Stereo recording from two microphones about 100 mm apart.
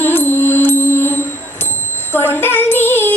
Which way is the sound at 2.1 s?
20° left (ahead or behind).